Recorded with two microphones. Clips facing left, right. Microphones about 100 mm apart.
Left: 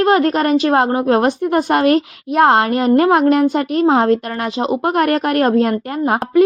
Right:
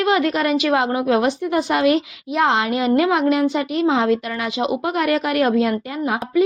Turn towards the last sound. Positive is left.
turn(degrees=55)  # may be behind; listen again after turning